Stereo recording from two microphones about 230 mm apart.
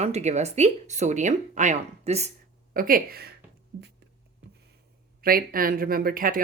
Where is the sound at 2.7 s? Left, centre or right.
Right.